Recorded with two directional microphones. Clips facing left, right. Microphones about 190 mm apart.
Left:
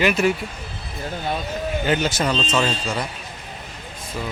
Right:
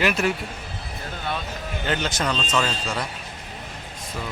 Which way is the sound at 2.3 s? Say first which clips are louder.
Left 3 dB; 25° left (ahead or behind).